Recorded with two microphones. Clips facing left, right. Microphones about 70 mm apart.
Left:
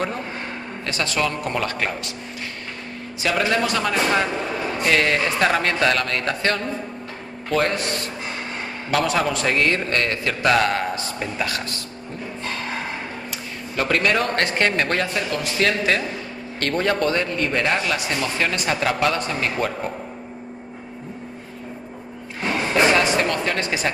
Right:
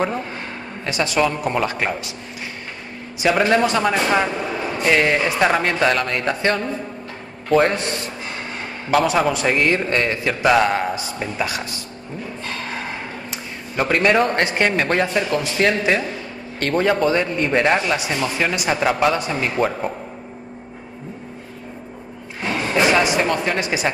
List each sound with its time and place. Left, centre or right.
0.8 s a man's voice: centre
3.2 s a man's voice: centre
4.3 s a sound: centre
4.8 s a man's voice: centre
8.9 s a man's voice: centre
13.7 s a man's voice: centre
15.0 s a man's voice: centre
22.7 s speech: centre